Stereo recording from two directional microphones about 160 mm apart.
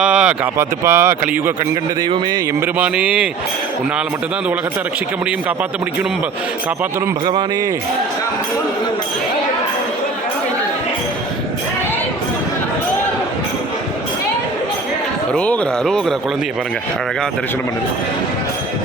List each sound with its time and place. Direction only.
0.0 s speech: 5° right (ahead or behind)
2.0 s speech: 25° right (ahead or behind)
2.6 s speech: 10° right (ahead or behind)
15.3 s speech: 5° left (ahead or behind)